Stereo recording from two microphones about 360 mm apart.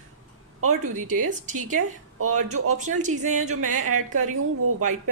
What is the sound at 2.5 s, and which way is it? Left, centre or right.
A woman's voice, right.